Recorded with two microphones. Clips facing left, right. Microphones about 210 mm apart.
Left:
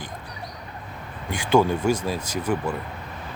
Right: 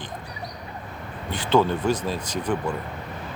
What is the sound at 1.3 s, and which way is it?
Speech, 10° left (ahead or behind).